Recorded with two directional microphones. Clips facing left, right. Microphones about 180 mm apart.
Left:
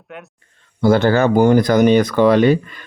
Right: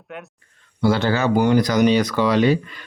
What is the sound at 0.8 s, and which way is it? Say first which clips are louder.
Speech: left 5 dB; 50° left (ahead or behind).